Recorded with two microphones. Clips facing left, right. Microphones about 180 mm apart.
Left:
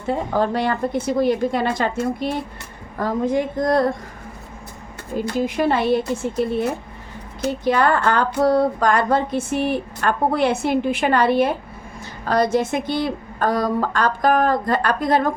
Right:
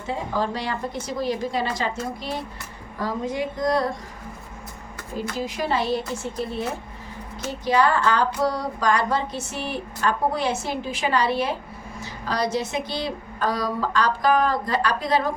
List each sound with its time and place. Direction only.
0.1 s a woman's voice: 55° left (ahead or behind)
5.4 s a woman's voice: 55° left (ahead or behind)
7.4 s a woman's voice: 55° left (ahead or behind)